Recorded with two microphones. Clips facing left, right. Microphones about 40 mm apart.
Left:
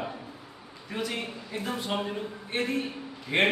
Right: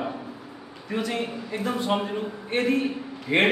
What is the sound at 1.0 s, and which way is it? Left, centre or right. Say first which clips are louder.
A man's voice: right 5 dB; centre.